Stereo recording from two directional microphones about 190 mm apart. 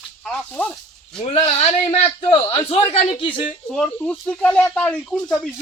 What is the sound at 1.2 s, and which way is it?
Speech, 35° left (ahead or behind).